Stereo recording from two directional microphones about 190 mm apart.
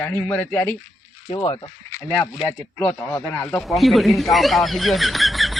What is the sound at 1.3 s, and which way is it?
Speech, 25° left (ahead or behind).